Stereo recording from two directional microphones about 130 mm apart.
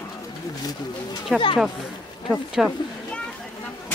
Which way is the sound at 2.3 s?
5° left (ahead or behind).